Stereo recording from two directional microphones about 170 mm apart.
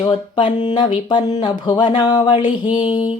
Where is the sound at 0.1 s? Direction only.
30° left (ahead or behind).